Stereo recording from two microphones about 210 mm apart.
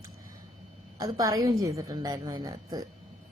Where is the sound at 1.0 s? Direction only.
15° right (ahead or behind).